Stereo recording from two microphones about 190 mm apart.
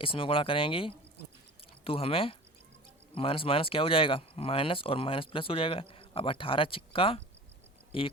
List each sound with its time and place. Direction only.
0.0 s speech: 30° left (ahead or behind)